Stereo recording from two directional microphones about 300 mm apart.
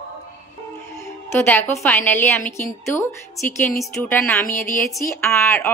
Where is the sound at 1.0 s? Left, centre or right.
Centre.